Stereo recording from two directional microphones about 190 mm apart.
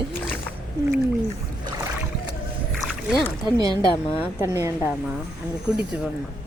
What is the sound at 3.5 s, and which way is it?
A woman's voice, 20° right (ahead or behind).